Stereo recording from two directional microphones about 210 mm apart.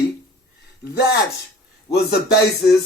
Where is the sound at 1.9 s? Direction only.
50° left (ahead or behind).